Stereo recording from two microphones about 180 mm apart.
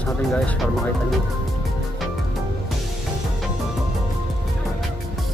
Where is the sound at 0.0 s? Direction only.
5° left (ahead or behind).